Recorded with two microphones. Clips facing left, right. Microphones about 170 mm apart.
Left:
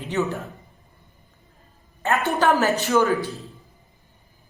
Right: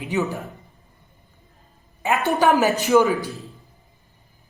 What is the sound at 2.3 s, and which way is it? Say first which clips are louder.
Speech: right 2 dB; 15° right (ahead or behind).